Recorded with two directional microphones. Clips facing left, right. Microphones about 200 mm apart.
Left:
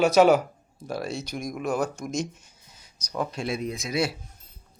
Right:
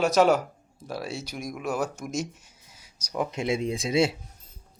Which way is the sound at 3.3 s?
20° right (ahead or behind).